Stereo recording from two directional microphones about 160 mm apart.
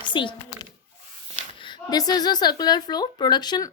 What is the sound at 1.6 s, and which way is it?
A woman's voice, 25° left (ahead or behind).